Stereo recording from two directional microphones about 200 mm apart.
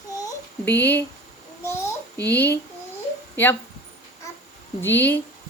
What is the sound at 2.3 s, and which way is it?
Speech, 10° left (ahead or behind).